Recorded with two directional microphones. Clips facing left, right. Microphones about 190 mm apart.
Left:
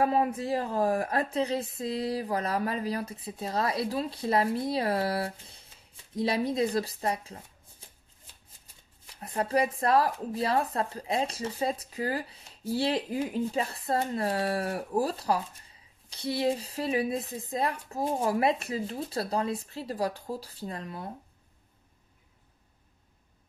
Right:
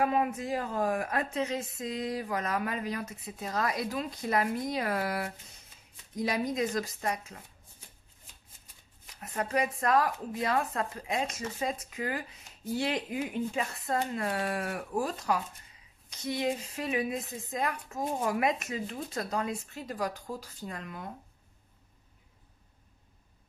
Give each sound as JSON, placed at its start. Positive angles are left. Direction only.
{"t": 0.0, "sound": "speech", "side_deg": 35}
{"t": 9.1, "sound": "speech", "side_deg": 35}